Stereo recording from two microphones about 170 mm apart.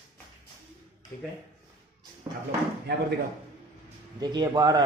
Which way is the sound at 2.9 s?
90° right.